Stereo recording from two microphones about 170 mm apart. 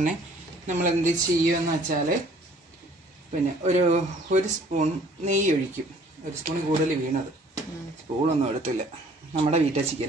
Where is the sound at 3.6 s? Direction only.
45° right (ahead or behind).